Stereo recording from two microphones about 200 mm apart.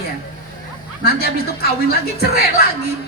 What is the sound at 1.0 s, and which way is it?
Speech, 50° left (ahead or behind).